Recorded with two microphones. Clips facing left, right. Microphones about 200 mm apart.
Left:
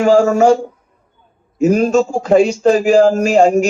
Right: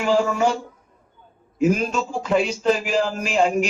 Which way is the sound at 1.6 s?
40° left (ahead or behind).